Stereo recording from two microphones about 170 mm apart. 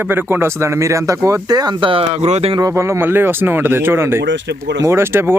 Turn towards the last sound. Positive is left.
turn(degrees=-15)  # may be behind; listen again after turning